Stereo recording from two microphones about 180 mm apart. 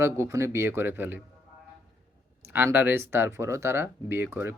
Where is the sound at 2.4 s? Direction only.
10° right (ahead or behind).